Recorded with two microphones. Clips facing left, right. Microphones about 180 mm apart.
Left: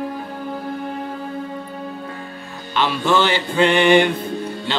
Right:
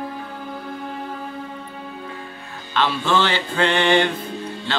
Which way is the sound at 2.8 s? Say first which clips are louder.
Left 2 dB; 10° left (ahead or behind).